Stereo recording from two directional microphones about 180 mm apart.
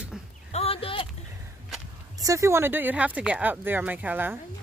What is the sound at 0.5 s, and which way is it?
Speech, 30° left (ahead or behind).